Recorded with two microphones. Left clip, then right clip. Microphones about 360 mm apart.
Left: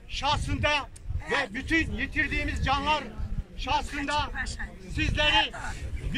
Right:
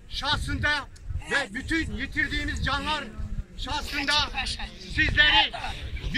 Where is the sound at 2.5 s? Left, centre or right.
Centre.